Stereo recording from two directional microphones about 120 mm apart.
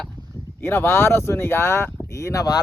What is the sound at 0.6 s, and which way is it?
Speech, 20° left (ahead or behind).